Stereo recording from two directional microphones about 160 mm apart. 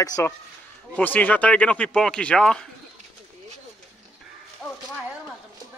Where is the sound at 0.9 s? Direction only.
10° left (ahead or behind).